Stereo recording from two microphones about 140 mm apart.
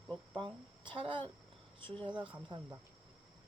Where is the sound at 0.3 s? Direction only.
35° right (ahead or behind).